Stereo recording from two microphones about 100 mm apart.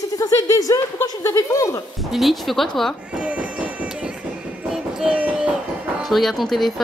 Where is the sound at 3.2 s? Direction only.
10° right (ahead or behind).